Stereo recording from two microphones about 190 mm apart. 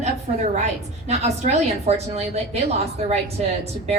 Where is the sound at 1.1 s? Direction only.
35° right (ahead or behind).